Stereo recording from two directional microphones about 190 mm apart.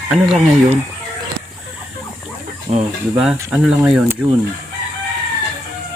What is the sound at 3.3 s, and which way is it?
Speech, 5° right (ahead or behind).